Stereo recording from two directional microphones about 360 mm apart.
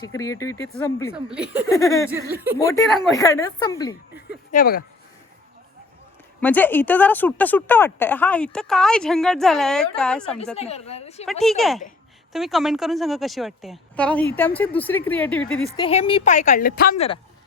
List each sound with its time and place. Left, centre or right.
0.0 s speech: centre
1.1 s a woman's voice: centre
1.6 s speech: centre
2.3 s a woman's voice: centre
2.6 s speech: centre
4.5 s speech: left
6.4 s a woman's voice: centre
10.6 s speech: centre
11.3 s a woman's voice: centre